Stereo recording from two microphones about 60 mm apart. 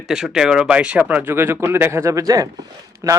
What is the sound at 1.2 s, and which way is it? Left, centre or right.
A man's voice, right.